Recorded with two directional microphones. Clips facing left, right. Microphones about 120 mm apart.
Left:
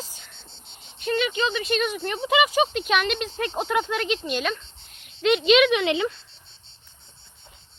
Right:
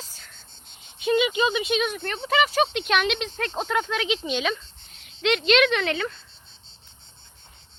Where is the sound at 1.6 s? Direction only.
Centre (ahead or behind).